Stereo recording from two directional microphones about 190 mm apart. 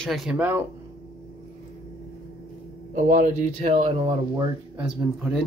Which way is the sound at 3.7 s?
25° right (ahead or behind).